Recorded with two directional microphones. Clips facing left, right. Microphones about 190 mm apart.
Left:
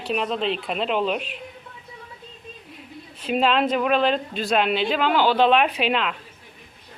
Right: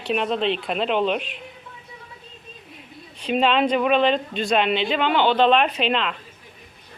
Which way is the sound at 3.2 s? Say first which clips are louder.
Right 1 dB; centre (ahead or behind).